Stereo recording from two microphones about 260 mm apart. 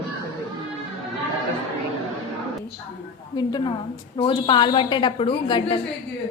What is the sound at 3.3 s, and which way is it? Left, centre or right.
A woman's voice, centre.